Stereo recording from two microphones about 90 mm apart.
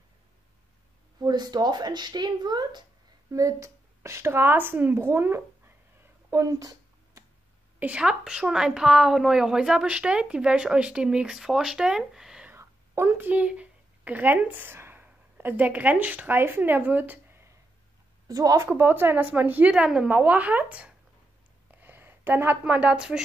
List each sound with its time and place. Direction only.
1.2 s speech: 50° right (ahead or behind)
3.3 s speech: 35° right (ahead or behind)
6.3 s a sound: 40° right (ahead or behind)
7.8 s a woman's voice: 10° right (ahead or behind)
12.4 s a sound: 25° right (ahead or behind)
13.3 s speech: 15° right (ahead or behind)
18.3 s a woman's voice: 40° right (ahead or behind)
18.8 s speech: 25° right (ahead or behind)
19.7 s a woman's voice: 10° right (ahead or behind)
21.6 s a sound: 20° right (ahead or behind)
22.6 s a woman's voice: 15° right (ahead or behind)